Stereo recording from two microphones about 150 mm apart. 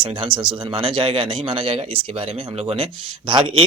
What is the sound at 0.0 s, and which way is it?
Speech, 35° right (ahead or behind).